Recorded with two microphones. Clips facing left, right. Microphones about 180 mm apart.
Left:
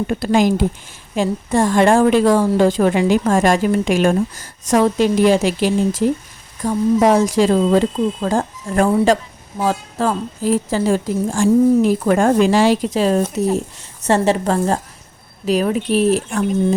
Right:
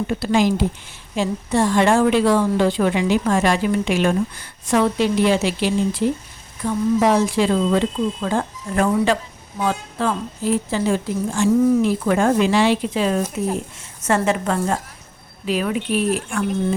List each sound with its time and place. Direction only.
0.1 s a woman's voice: 50° left (ahead or behind)